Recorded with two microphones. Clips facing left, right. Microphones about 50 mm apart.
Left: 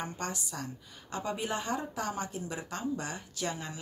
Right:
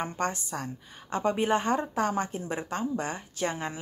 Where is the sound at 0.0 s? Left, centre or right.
Right.